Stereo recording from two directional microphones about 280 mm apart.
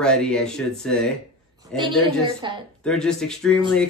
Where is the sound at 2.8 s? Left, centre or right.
Centre.